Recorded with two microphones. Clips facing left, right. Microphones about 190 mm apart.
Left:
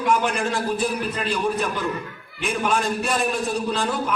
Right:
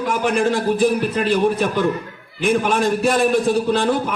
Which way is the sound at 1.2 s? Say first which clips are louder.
Right 6 dB; 60° right (ahead or behind).